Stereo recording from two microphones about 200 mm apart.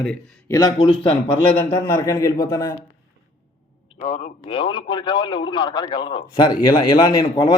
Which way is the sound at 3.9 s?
35° left (ahead or behind).